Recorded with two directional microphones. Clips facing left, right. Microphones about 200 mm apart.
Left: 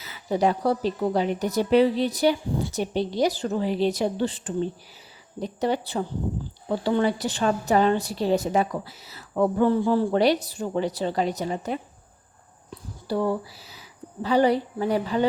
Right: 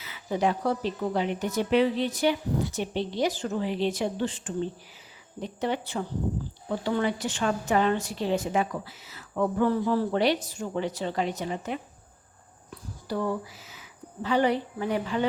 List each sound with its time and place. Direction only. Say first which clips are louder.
0.0 s a woman's voice: left 4 dB; 40° left (ahead or behind)
10.1 s a woman's voice: left 4 dB; 40° left (ahead or behind)
13.1 s a woman's voice: left 4 dB; 30° left (ahead or behind)